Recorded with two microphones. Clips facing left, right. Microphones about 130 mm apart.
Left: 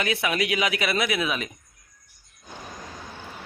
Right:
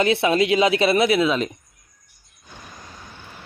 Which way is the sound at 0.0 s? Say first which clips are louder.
Right 7 dB; 30° right (ahead or behind).